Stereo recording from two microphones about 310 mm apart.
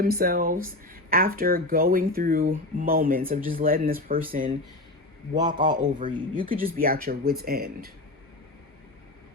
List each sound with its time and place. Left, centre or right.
0.0 s speech: right
5.3 s a man's voice: centre
6.4 s speech: right